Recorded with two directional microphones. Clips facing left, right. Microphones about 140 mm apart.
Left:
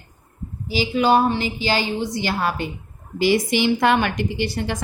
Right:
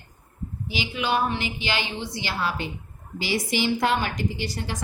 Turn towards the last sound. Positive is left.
turn(degrees=60)  # may be behind; listen again after turning